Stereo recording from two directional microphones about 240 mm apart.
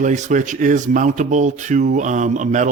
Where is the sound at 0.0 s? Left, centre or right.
Right.